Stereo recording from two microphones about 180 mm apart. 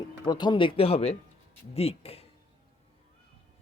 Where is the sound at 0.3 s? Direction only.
25° left (ahead or behind).